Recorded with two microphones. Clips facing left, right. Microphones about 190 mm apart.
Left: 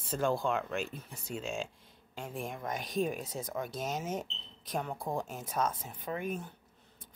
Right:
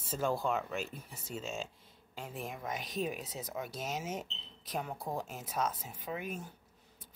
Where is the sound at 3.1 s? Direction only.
45° left (ahead or behind).